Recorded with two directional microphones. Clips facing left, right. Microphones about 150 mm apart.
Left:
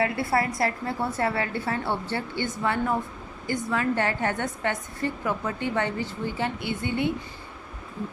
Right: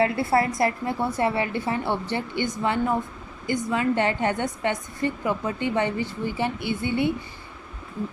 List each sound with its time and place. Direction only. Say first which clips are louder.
0.0 s a woman's voice: right 3 dB; 25° right (ahead or behind)
6.7 s a woman's voice: right 3 dB; 50° left (ahead or behind)